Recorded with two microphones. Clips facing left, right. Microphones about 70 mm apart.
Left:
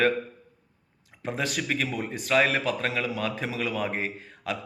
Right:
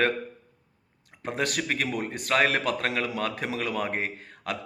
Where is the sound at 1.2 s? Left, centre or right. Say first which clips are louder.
Right 1 dB; right.